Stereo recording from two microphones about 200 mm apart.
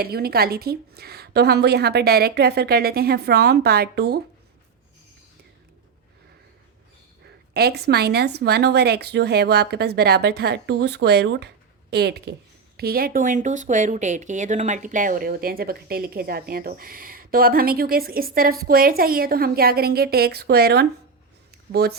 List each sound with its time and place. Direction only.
0.0 s speech: 50° right (ahead or behind)
7.5 s speech: 55° right (ahead or behind)
21.5 s a sound: 50° right (ahead or behind)